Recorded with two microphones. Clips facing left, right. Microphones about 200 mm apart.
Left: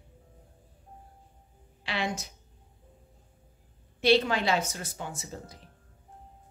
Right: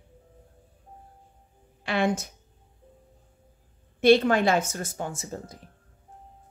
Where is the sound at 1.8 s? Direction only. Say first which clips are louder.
Right 7 dB; 50° right (ahead or behind).